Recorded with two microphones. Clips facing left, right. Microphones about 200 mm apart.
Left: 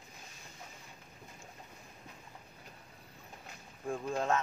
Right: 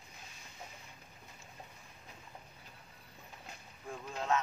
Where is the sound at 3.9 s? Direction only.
50° left (ahead or behind).